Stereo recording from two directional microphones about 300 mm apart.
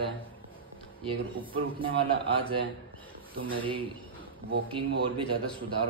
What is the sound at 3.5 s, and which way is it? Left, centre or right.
A man's voice, centre.